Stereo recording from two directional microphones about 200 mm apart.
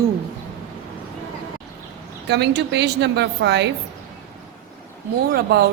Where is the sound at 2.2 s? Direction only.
60° right (ahead or behind).